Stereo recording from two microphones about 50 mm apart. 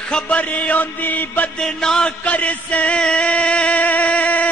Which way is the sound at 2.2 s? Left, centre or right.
Left.